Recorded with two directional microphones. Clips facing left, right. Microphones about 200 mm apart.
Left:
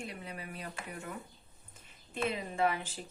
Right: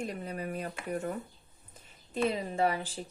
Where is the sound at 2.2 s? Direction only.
35° right (ahead or behind).